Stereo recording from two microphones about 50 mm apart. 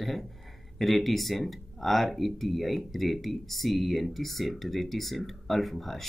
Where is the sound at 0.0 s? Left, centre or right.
Centre.